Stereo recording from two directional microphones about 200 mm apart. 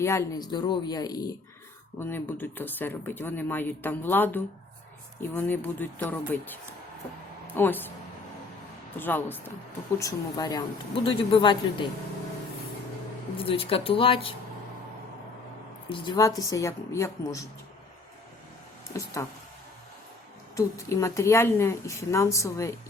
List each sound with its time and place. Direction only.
0.0 s a woman's voice: 15° left (ahead or behind)
9.0 s speech: 10° left (ahead or behind)
13.3 s speech: 25° left (ahead or behind)
15.9 s speech: 20° left (ahead or behind)
19.2 s speech: 15° left (ahead or behind)
20.6 s speech: 15° left (ahead or behind)